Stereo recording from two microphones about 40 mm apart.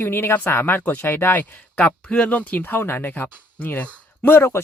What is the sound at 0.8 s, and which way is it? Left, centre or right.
Speech, left.